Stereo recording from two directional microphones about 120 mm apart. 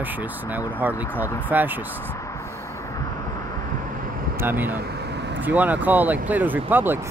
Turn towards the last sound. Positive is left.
turn(degrees=-15)  # may be behind; listen again after turning